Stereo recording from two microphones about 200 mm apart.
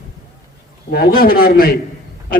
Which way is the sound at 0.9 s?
50° left (ahead or behind).